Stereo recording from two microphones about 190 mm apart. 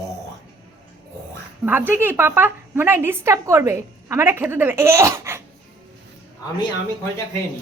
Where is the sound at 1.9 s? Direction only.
10° right (ahead or behind).